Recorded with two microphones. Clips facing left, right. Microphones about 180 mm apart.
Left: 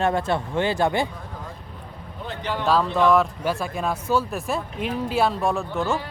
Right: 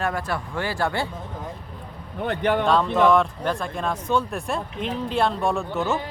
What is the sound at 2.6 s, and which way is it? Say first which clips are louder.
Speech: left 1 dB; centre (ahead or behind).